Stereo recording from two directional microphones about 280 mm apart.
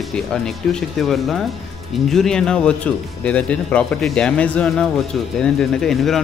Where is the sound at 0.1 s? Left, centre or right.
Centre.